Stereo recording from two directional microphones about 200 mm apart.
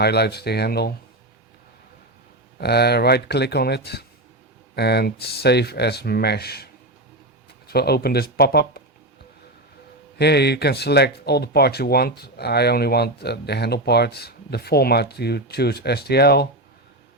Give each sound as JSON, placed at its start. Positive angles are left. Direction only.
{"t": 0.0, "sound": "speech", "side_deg": 55}
{"t": 2.6, "sound": "speech", "side_deg": 55}
{"t": 7.7, "sound": "speech", "side_deg": 50}
{"t": 10.2, "sound": "speech", "side_deg": 55}